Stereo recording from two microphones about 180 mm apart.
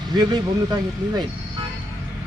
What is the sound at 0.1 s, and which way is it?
Speech, 25° right (ahead or behind).